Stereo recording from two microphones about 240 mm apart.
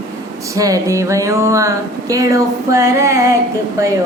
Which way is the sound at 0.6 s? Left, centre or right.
Centre.